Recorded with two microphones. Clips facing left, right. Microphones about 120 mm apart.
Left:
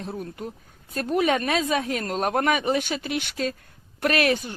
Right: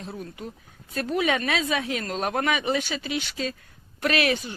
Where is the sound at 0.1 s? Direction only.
40° left (ahead or behind).